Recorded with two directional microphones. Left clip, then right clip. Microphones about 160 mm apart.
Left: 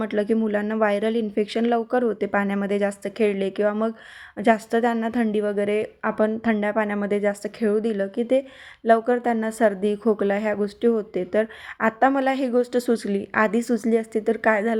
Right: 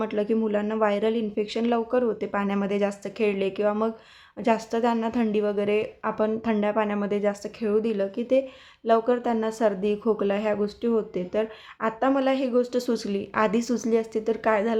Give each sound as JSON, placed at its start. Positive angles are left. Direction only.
{"t": 0.0, "sound": "speech", "side_deg": 30}